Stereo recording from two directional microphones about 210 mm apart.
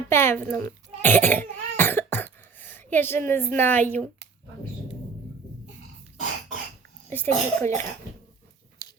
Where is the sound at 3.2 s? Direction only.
10° left (ahead or behind).